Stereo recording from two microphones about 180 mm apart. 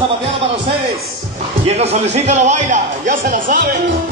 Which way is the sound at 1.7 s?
35° right (ahead or behind).